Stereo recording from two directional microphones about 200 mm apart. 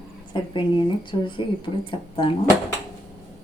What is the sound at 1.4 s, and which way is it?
Speech, 25° left (ahead or behind).